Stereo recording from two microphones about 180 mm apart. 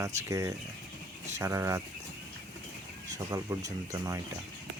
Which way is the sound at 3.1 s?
20° right (ahead or behind).